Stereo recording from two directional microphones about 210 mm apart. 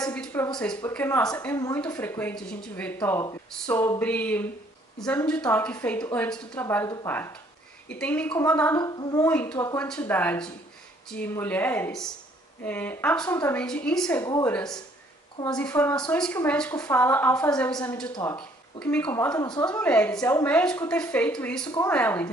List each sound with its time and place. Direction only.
0.0 s a sound: 5° left (ahead or behind)
0.7 s speech: 10° left (ahead or behind)
19.3 s a woman's voice: 20° left (ahead or behind)
19.6 s speech: 5° left (ahead or behind)